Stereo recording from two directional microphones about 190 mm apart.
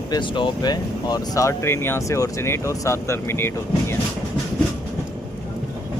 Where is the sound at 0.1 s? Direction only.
25° left (ahead or behind).